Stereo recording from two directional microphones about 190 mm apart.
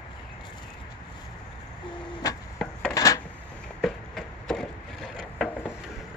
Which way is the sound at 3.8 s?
Centre (ahead or behind).